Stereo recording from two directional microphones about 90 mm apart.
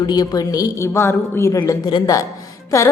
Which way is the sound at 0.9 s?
30° left (ahead or behind).